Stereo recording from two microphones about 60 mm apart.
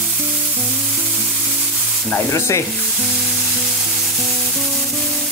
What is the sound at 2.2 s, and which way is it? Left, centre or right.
Sizzle, left.